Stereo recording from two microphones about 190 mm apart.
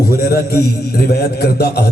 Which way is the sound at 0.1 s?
55° left (ahead or behind).